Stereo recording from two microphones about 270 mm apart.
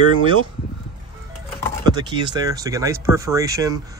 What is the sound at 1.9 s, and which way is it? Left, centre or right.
A man's voice, centre.